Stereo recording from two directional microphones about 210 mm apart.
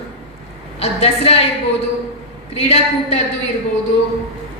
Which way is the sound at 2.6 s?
30° left (ahead or behind).